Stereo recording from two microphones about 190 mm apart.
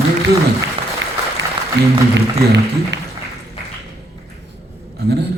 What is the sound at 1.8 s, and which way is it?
Speech, 65° right (ahead or behind).